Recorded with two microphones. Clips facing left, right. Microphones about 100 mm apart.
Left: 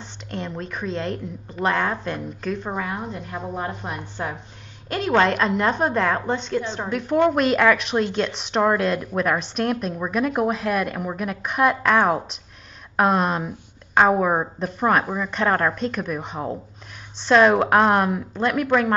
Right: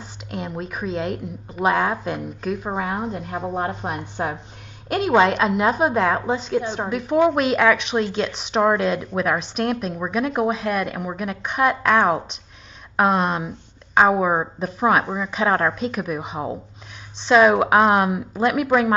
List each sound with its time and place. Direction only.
0.0 s a woman's voice: 5° right (ahead or behind)
2.7 s a woman's voice: 20° right (ahead or behind)
4.8 s a woman's voice: 10° right (ahead or behind)